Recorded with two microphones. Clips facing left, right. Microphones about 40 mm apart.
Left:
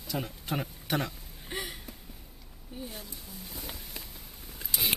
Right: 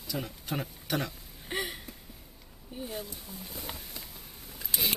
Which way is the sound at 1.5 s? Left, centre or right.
Centre.